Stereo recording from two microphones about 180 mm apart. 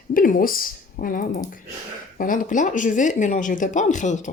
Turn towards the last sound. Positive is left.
turn(degrees=45)  # may be behind; listen again after turning